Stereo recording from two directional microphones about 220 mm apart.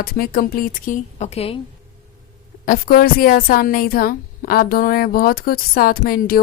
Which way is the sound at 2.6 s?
40° left (ahead or behind).